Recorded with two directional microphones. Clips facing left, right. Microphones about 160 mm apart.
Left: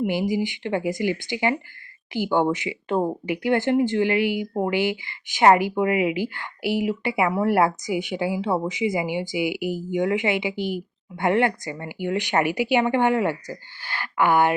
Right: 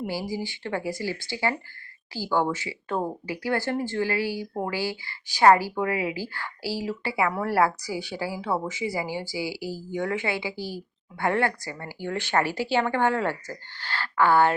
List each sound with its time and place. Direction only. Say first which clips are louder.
0.0 s speech: left 7 dB; 20° left (ahead or behind)